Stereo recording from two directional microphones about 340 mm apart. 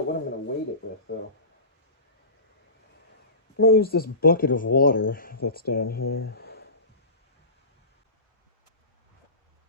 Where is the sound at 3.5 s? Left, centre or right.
Left.